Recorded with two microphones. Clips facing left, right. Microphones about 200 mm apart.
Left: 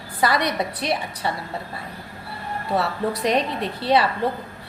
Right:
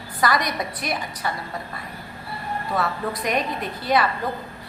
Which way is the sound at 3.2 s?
30° left (ahead or behind).